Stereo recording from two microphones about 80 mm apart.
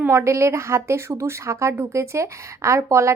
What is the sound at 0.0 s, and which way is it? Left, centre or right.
A woman's voice, right.